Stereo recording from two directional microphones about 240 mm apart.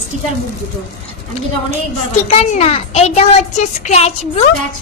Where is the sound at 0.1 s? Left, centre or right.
Right.